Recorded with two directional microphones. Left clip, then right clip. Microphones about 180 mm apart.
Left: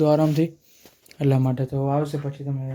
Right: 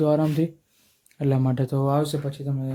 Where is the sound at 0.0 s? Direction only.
10° left (ahead or behind).